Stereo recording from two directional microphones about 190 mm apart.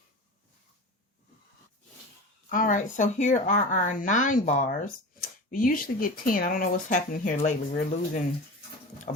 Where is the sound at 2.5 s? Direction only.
45° left (ahead or behind).